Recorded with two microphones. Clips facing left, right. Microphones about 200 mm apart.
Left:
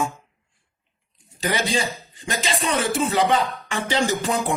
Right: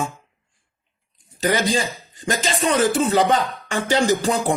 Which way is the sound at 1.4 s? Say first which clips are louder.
Right 4 dB; 45° right (ahead or behind).